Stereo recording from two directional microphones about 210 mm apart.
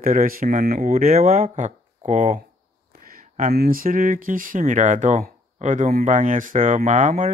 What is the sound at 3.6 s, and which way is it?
Speech, 45° right (ahead or behind).